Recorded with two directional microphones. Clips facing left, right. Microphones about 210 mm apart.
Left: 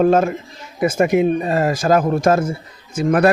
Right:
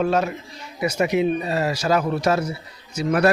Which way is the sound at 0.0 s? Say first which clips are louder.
Left 7 dB; 50° left (ahead or behind).